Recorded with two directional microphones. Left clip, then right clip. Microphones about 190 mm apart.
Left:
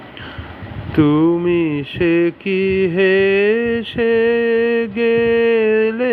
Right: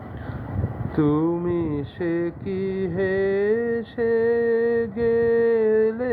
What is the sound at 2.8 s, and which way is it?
Mantra, 30° left (ahead or behind).